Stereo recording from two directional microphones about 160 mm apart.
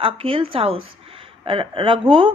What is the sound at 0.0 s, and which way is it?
Speech, 35° right (ahead or behind).